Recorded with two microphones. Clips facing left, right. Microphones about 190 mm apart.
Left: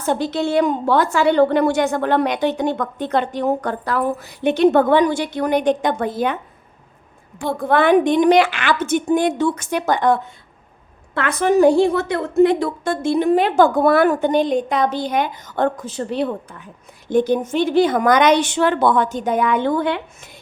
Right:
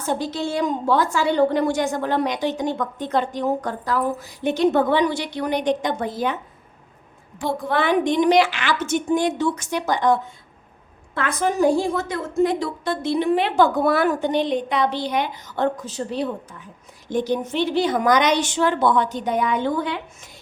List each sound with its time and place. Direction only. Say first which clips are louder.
0.0 s a woman's voice: left 4 dB; 65° left (ahead or behind)
7.3 s a woman's voice: left 5 dB; 55° left (ahead or behind)
11.1 s a woman's voice: left 6 dB; 65° left (ahead or behind)